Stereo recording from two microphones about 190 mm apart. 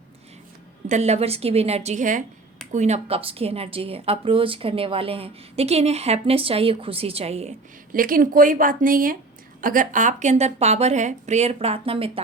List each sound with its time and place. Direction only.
0.9 s a woman's voice: 35° right (ahead or behind)
7.9 s a woman's voice: 45° right (ahead or behind); by 12.2 s 30° right (ahead or behind)